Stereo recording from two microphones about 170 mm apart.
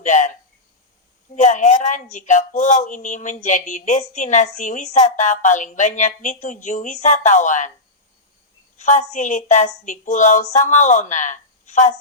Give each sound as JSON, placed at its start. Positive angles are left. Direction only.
{"t": 0.0, "sound": "a sound", "side_deg": 45}
{"t": 1.4, "sound": "speech", "side_deg": 45}
{"t": 8.8, "sound": "speech", "side_deg": 45}